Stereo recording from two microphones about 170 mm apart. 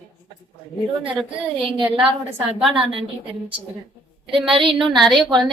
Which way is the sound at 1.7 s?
30° right (ahead or behind).